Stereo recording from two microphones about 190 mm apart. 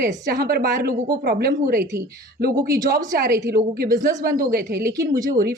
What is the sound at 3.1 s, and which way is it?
Speech, 55° right (ahead or behind).